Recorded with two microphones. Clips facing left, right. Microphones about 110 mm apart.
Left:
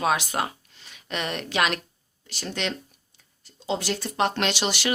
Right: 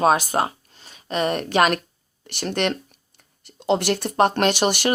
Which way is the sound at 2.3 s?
60° right (ahead or behind).